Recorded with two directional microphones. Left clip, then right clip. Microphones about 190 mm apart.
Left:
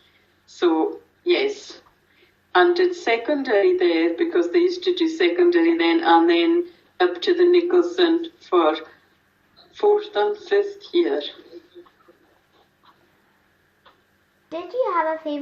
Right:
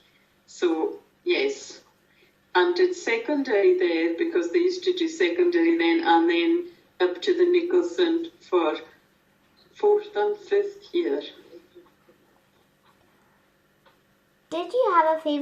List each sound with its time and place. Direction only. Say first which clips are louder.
0.6 s a woman's voice: left 5 dB; 35° left (ahead or behind)
9.8 s a woman's voice: left 3 dB; 40° left (ahead or behind)
14.5 s a child's voice: right 2 dB; 10° right (ahead or behind)